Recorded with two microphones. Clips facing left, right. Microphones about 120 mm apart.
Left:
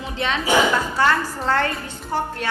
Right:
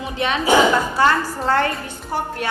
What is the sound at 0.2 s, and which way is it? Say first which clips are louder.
A woman's voice: right 3 dB; 15° right (ahead or behind).